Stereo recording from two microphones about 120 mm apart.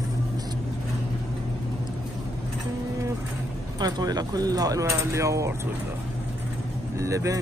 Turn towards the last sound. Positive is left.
turn(degrees=-25)  # may be behind; listen again after turning